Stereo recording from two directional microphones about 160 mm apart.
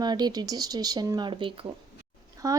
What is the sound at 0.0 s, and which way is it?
A woman's voice, 25° right (ahead or behind).